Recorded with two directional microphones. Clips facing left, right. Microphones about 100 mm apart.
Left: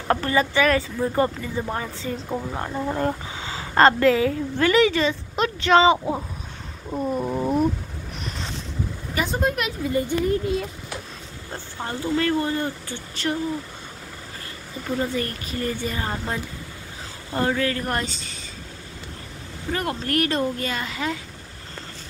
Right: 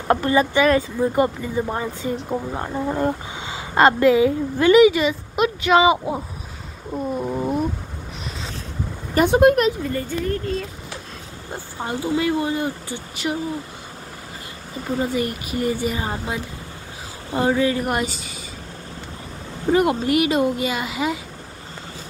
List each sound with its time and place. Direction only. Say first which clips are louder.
0.1 s a woman's voice: right 3 dB; 20° right (ahead or behind)
6.9 s a sound: even; centre (ahead or behind)
9.1 s speech: right 10 dB; 60° right (ahead or behind)
9.8 s speech: left 2 dB; 10° left (ahead or behind)
11.5 s a woman's voice: right 3 dB; 15° right (ahead or behind)
14.9 s a woman's voice: right 3 dB; 15° right (ahead or behind)
19.7 s a woman's voice: right 8 dB; 15° right (ahead or behind)